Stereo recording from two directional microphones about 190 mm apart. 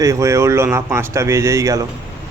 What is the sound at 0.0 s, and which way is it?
Speech, 15° right (ahead or behind).